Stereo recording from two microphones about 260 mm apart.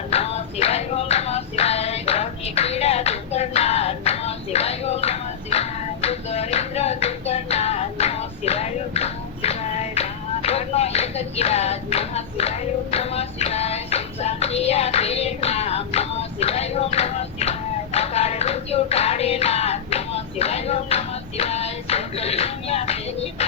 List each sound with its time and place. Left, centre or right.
0.1 s music: left